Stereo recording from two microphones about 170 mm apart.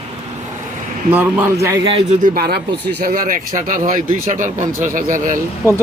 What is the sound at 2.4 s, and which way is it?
Speech, 70° right (ahead or behind).